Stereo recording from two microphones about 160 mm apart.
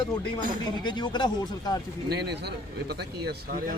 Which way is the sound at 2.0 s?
90° right.